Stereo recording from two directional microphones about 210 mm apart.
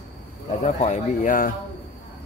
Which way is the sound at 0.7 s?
35° left (ahead or behind).